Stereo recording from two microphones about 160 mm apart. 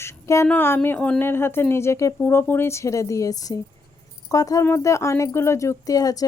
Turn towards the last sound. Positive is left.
turn(degrees=25)  # may be behind; listen again after turning